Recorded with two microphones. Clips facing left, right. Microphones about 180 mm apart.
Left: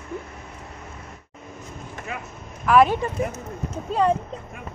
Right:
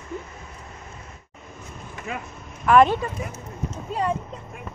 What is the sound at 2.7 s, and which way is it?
Speech, 5° left (ahead or behind).